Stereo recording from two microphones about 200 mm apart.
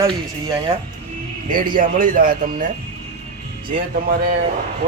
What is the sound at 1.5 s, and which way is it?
Speech, 45° right (ahead or behind).